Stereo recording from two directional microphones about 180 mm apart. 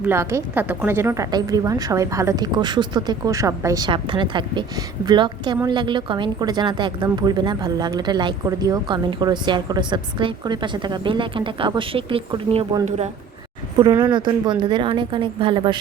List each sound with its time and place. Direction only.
0.0 s a woman's voice: 15° right (ahead or behind); by 13.1 s 35° right (ahead or behind)
13.7 s a woman's voice: 25° right (ahead or behind)